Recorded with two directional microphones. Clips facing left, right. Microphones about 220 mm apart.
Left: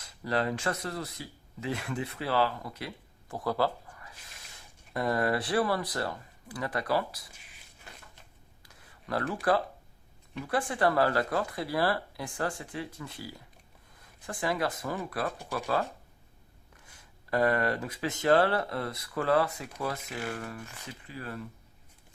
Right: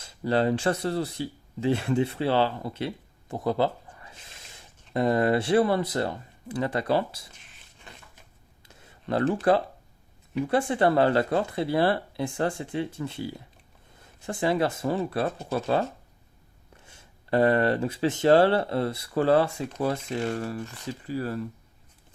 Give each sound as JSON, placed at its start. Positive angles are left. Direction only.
{"t": 0.0, "sound": "speech", "side_deg": -30}
{"t": 8.6, "sound": "a sound", "side_deg": -25}
{"t": 10.4, "sound": "speech", "side_deg": -25}